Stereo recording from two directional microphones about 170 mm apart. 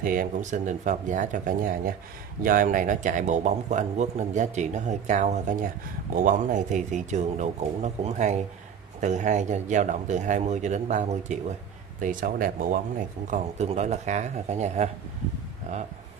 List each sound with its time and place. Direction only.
0.0 s speech: 55° right (ahead or behind)
13.3 s speech: 40° right (ahead or behind)